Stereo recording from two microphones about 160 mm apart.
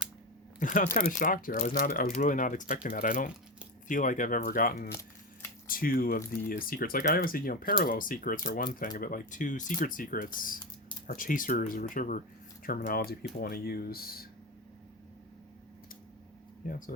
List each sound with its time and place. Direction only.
0.6 s speech: 55° left (ahead or behind); by 14.3 s 70° left (ahead or behind)
16.6 s speech: 60° left (ahead or behind)